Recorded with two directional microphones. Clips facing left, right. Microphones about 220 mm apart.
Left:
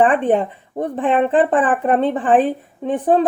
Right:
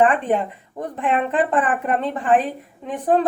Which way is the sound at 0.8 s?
30° left (ahead or behind).